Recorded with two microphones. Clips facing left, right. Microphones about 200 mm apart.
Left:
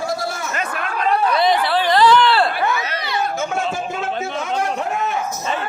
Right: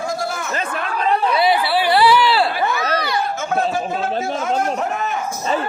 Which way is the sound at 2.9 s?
25° left (ahead or behind).